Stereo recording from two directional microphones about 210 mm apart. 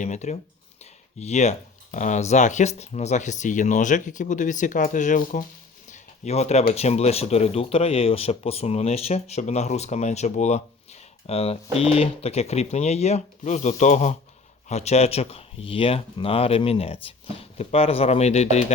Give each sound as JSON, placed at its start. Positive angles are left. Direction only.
{"t": 0.0, "sound": "speech", "side_deg": 35}
{"t": 5.9, "sound": "a sound", "side_deg": 30}
{"t": 6.7, "sound": "speech", "side_deg": 30}